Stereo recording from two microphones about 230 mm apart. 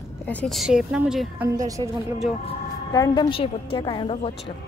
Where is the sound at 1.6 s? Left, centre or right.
Centre.